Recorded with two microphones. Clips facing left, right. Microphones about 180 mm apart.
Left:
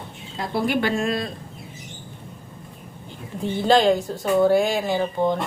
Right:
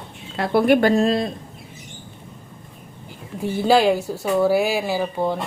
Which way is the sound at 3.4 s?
5° right (ahead or behind).